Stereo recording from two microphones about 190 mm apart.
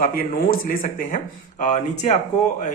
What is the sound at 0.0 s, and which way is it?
Speech, 45° left (ahead or behind).